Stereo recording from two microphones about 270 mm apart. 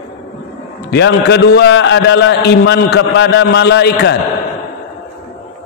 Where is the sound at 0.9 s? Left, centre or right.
Left.